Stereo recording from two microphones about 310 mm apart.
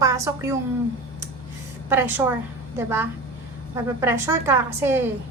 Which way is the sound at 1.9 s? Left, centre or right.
Centre.